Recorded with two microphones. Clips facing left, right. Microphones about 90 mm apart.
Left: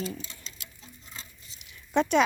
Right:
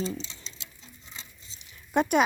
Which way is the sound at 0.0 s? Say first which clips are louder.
Right 3 dB; 25° right (ahead or behind).